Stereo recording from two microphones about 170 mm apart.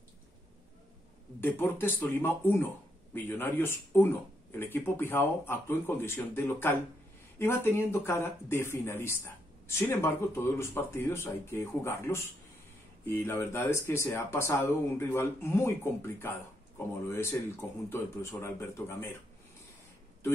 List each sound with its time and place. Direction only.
1.4 s speech: 10° left (ahead or behind)